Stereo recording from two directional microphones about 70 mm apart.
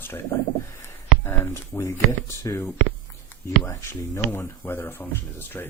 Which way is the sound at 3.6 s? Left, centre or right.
Left.